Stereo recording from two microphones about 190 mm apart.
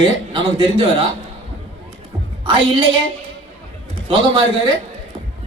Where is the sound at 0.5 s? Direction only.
30° right (ahead or behind).